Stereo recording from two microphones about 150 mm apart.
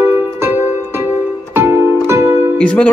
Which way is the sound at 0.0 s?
15° right (ahead or behind).